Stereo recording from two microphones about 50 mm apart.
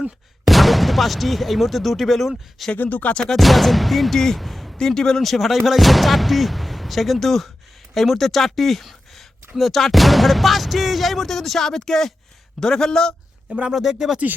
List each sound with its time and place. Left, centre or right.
0.4 s speech: centre
2.7 s speech: left
3.2 s speech: centre
4.8 s a man's voice: centre
13.5 s speech: right
13.7 s speech: centre